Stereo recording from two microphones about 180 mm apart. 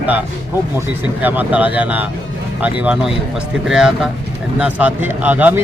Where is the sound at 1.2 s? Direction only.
10° right (ahead or behind).